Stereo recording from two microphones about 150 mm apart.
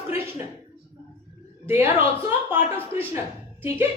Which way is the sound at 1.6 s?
15° right (ahead or behind).